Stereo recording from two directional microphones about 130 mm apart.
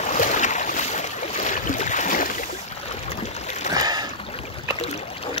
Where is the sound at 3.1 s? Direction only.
60° left (ahead or behind).